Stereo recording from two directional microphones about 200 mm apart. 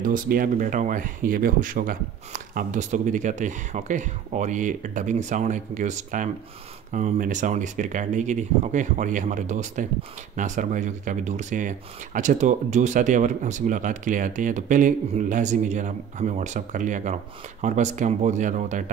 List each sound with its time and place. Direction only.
0.0 s speech: 45° right (ahead or behind)